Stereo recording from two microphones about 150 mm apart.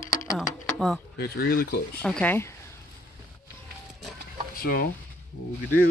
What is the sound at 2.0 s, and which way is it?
Speech, 10° left (ahead or behind).